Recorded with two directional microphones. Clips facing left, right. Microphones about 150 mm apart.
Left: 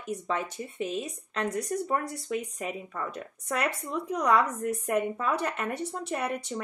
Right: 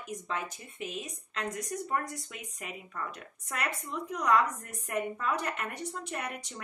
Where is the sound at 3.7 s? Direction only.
35° left (ahead or behind).